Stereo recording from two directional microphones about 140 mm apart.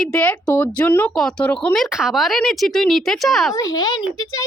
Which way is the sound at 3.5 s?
25° left (ahead or behind).